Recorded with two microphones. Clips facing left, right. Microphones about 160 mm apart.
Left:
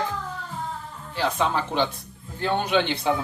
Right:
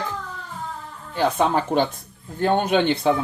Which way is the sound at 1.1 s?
50° right (ahead or behind).